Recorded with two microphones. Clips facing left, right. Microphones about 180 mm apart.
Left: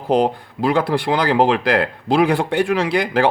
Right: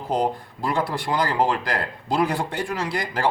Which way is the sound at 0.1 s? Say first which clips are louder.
Left 7 dB; 70° left (ahead or behind).